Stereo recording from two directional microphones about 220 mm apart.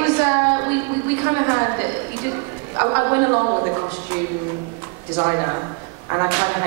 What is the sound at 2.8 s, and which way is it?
Speech, 20° right (ahead or behind).